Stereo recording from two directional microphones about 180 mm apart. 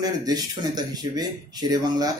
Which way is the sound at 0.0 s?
20° right (ahead or behind).